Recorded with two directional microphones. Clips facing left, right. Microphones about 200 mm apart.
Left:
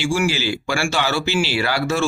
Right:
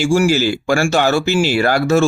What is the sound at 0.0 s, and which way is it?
Speech, 45° right (ahead or behind).